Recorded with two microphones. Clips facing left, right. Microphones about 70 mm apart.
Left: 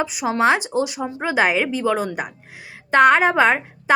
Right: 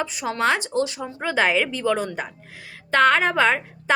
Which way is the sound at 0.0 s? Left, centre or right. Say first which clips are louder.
Left 4 dB; centre.